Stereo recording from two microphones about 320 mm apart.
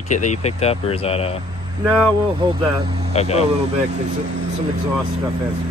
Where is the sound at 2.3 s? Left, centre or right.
Centre.